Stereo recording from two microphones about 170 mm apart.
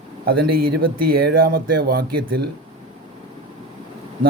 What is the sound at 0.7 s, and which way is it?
Speech, 65° right (ahead or behind).